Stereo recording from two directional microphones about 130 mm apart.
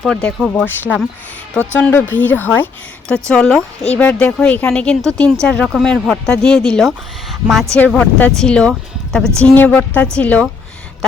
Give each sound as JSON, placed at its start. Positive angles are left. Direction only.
{"t": 0.0, "sound": "speech", "side_deg": 5}
{"t": 7.8, "sound": "speech", "side_deg": 15}